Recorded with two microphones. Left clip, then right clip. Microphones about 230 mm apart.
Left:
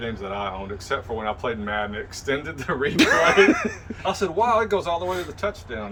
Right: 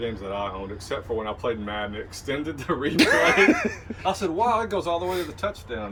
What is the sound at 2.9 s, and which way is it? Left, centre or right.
Speech, centre.